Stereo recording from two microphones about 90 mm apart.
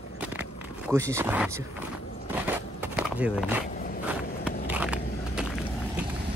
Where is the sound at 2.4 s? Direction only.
20° right (ahead or behind).